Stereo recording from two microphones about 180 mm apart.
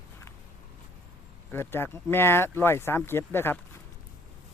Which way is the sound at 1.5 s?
10° left (ahead or behind).